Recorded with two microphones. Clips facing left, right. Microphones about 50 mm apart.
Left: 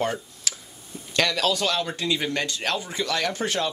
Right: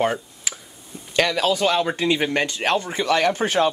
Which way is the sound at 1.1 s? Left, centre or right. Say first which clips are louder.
Right 3 dB; centre.